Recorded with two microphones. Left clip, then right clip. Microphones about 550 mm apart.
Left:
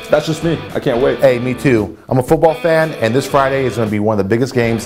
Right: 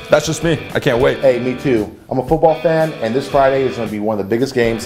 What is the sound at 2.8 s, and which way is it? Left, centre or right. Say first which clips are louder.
Speech: left 2 dB; left.